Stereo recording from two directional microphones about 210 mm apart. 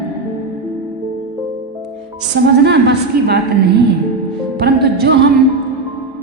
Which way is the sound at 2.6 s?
55° right (ahead or behind).